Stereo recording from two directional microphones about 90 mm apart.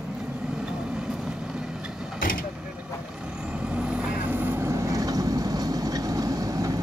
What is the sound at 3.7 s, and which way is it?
Vehicle, 15° right (ahead or behind).